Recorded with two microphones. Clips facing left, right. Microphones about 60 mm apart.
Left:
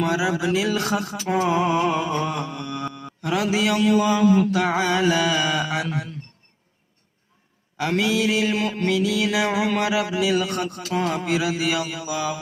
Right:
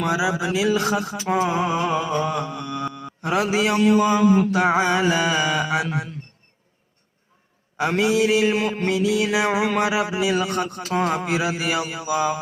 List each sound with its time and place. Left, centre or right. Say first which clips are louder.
0.0 s mantra: even; centre
1.4 s a sound: left 2 dB; centre
2.1 s mantra: right 2 dB; right
3.2 s mantra: right 1 dB; right
7.8 s mantra: right 2 dB; right